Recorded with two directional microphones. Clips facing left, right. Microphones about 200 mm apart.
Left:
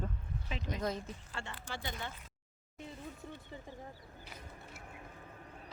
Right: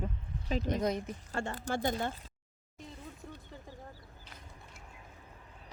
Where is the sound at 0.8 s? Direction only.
15° right (ahead or behind).